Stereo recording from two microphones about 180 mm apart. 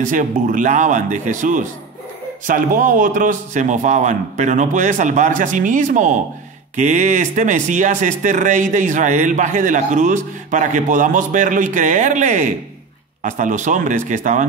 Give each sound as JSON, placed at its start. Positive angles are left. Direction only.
{"t": 0.0, "sound": "speech", "side_deg": -45}